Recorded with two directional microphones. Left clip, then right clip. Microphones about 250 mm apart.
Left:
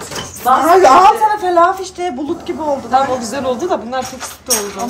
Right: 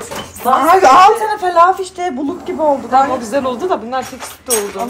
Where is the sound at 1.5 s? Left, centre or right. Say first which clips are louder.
Right 1 dB; right.